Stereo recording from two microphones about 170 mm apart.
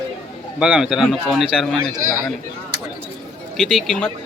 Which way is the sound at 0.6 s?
5° right (ahead or behind).